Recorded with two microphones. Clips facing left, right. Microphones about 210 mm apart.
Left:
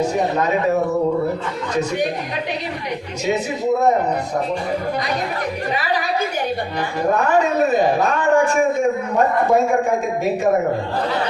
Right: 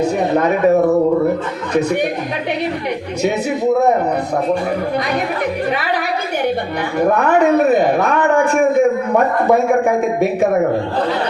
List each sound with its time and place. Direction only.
0.0 s speech: 60° right (ahead or behind)
7.1 s a man's voice: 60° right (ahead or behind)